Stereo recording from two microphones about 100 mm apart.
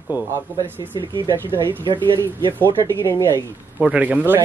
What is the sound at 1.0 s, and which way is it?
Speech, 55° right (ahead or behind).